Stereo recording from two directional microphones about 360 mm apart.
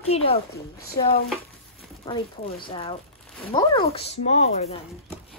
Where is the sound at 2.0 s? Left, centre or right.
Centre.